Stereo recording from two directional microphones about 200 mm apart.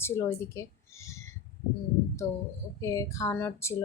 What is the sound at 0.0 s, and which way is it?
Speech, 15° left (ahead or behind).